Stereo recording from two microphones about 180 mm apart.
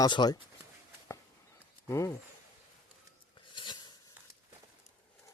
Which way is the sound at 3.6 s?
25° left (ahead or behind).